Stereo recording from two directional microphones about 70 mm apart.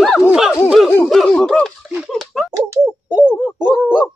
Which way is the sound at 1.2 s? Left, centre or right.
Centre.